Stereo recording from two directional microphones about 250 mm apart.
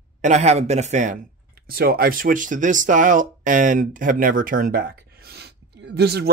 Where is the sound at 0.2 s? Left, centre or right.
Right.